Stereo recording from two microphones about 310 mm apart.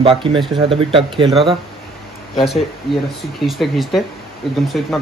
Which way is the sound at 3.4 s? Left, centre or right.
Centre.